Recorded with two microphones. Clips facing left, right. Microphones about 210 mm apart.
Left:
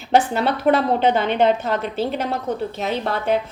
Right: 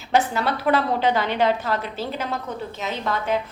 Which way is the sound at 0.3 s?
30° left (ahead or behind).